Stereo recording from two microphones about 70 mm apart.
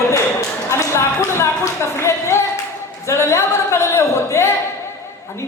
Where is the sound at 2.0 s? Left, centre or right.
Left.